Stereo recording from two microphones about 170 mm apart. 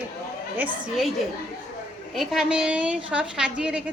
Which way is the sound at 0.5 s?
10° right (ahead or behind).